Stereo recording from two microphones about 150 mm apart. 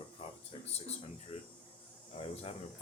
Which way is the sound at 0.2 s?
45° left (ahead or behind).